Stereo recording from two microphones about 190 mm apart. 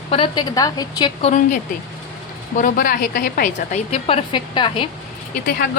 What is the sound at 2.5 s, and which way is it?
A woman's voice, 45° left (ahead or behind).